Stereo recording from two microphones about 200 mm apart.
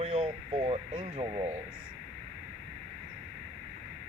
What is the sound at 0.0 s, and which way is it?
Radio, 30° right (ahead or behind).